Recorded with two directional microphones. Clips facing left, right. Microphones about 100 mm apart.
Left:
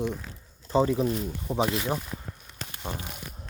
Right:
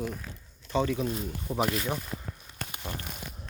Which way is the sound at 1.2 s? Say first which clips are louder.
Left 2 dB; 20° left (ahead or behind).